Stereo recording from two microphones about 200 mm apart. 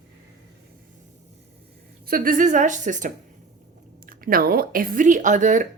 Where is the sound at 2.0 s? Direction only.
45° right (ahead or behind).